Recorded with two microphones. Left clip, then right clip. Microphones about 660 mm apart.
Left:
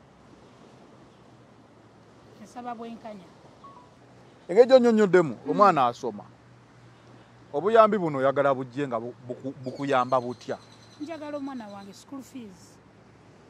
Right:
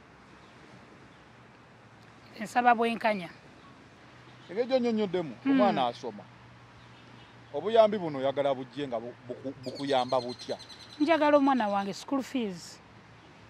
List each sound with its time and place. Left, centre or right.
2.5 s speech: right
4.5 s speech: left
7.5 s a man's voice: left
11.1 s speech: right